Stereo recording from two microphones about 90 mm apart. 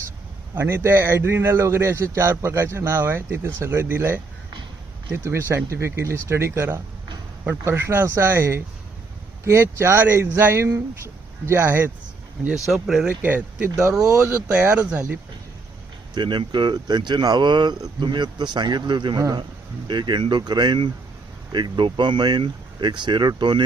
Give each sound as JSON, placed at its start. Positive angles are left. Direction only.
{"t": 0.5, "sound": "a man's voice", "side_deg": -25}
{"t": 12.6, "sound": "speech", "side_deg": -5}
{"t": 13.2, "sound": "a man's voice", "side_deg": -20}
{"t": 13.7, "sound": "speech", "side_deg": -35}
{"t": 14.5, "sound": "speech", "side_deg": -15}
{"t": 16.1, "sound": "speech", "side_deg": -55}